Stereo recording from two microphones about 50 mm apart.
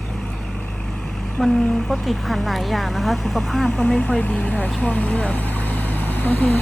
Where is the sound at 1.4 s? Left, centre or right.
Centre.